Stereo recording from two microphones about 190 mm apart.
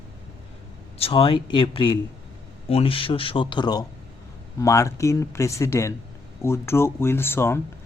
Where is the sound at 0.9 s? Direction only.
30° left (ahead or behind).